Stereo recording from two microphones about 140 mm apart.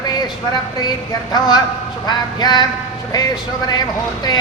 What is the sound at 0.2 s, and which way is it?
Speech, 30° left (ahead or behind).